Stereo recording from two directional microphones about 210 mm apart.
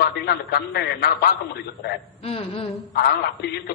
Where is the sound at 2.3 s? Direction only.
30° left (ahead or behind).